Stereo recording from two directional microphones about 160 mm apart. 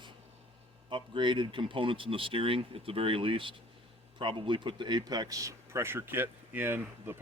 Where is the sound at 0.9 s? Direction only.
30° right (ahead or behind).